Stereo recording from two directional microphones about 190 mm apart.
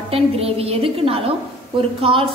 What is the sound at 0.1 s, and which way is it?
A woman's voice, 30° right (ahead or behind).